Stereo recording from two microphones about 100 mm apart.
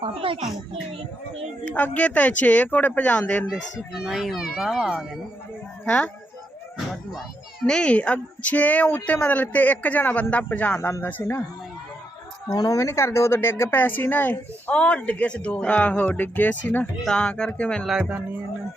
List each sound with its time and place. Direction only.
0.0 s a child's voice: 65° right (ahead or behind)
1.6 s speech: 15° left (ahead or behind)
3.5 s a child's voice: 5° right (ahead or behind)
5.8 s speech: 10° left (ahead or behind)
6.9 s a child's voice: centre (ahead or behind)
7.6 s speech: 10° left (ahead or behind)
10.8 s speech: 25° left (ahead or behind)
12.5 s speech: 35° left (ahead or behind); by 17.8 s 10° left (ahead or behind)
17.8 s speech: 10° right (ahead or behind)